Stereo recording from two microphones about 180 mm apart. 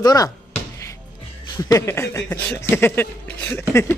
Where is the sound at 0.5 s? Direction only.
15° left (ahead or behind).